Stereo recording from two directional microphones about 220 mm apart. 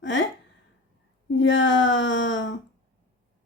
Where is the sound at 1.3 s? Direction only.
55° left (ahead or behind).